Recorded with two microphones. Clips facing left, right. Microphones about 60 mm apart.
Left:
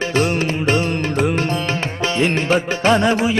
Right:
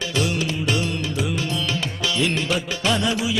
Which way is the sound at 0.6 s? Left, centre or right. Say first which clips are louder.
Left 6 dB; left.